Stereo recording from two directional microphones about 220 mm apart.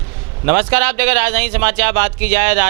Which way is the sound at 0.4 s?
10° right (ahead or behind).